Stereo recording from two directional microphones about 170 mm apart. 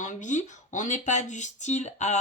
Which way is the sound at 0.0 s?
50° left (ahead or behind).